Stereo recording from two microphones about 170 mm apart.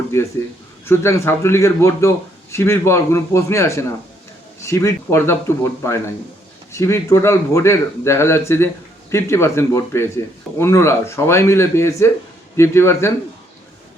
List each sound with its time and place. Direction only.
0.1 s speech: 15° left (ahead or behind)